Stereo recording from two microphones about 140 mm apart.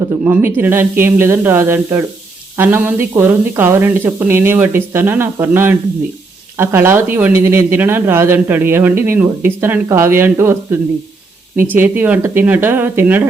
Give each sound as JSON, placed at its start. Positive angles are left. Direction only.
{"t": 0.3, "sound": "speech", "side_deg": -15}